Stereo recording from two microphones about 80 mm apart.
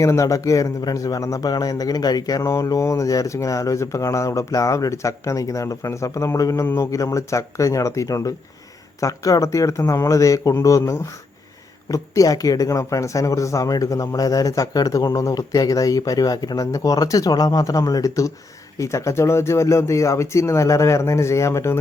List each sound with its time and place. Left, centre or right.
0.0 s speech: left